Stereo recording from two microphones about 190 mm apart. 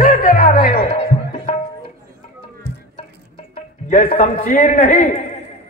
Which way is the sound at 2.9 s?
40° left (ahead or behind).